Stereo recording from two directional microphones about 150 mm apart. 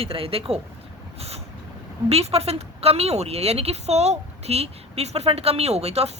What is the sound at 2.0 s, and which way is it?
A woman's voice, 40° right (ahead or behind).